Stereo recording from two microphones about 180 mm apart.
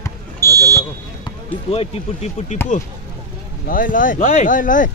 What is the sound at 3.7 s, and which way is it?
Speech, 50° left (ahead or behind).